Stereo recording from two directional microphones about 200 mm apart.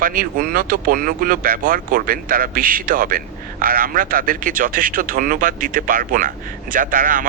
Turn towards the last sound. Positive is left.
turn(degrees=-45)  # may be behind; listen again after turning